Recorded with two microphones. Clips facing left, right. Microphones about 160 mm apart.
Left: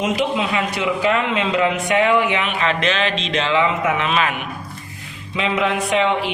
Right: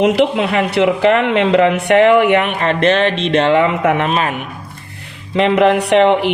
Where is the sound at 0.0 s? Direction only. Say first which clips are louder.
Right 7 dB; 65° right (ahead or behind); by 4.4 s 45° right (ahead or behind).